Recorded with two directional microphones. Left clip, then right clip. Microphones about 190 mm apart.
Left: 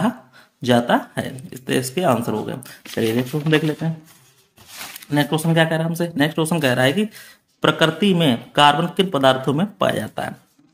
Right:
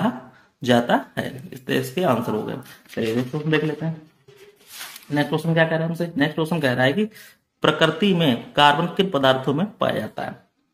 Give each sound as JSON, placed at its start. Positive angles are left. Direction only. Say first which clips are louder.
{"t": 0.6, "sound": "speech", "louder": "left 2 dB", "side_deg": 15}
{"t": 5.1, "sound": "speech", "louder": "left 2 dB", "side_deg": 25}